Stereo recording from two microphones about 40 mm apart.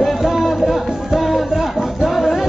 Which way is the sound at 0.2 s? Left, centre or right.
Centre.